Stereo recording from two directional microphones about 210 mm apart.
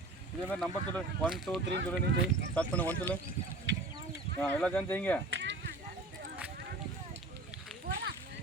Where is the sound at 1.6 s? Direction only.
55° right (ahead or behind).